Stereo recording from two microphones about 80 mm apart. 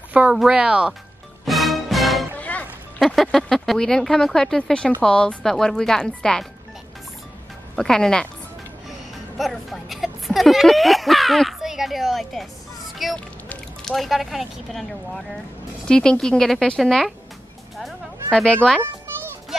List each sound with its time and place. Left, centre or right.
0.3 s speech: centre
1.4 s music: centre
2.3 s music: centre
3.0 s speech: centre
7.7 s speech: centre
9.4 s speech: centre
12.9 s music: centre
13.8 s speech: centre
17.7 s fowl: centre